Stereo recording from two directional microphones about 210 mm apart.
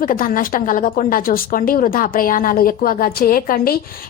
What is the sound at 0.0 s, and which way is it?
A woman's voice, 40° left (ahead or behind).